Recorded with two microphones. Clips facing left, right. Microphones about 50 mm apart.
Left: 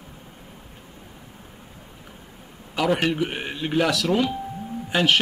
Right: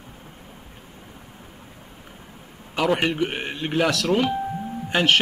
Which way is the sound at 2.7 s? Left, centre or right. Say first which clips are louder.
Even; centre.